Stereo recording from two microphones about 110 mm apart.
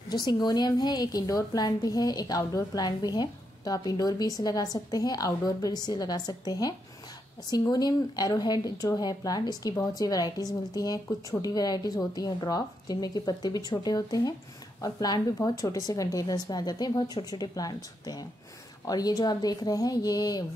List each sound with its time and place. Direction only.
0.1 s a woman's voice: 40° left (ahead or behind)
18.9 s a woman's voice: 35° left (ahead or behind)